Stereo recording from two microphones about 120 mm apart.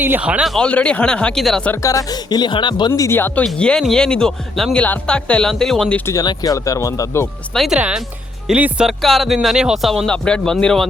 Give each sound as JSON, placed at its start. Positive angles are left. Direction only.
{"t": 0.0, "sound": "speech", "side_deg": -15}
{"t": 0.5, "sound": "speech", "side_deg": 10}
{"t": 1.7, "sound": "speech", "side_deg": 25}
{"t": 3.4, "sound": "speech", "side_deg": 5}
{"t": 6.1, "sound": "speech", "side_deg": 30}
{"t": 7.5, "sound": "speech", "side_deg": 0}